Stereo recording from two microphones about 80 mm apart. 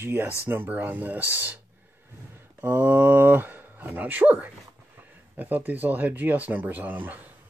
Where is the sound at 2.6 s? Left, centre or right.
Right.